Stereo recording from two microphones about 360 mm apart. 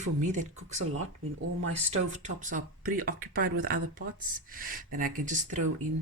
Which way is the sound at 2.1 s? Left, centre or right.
Centre.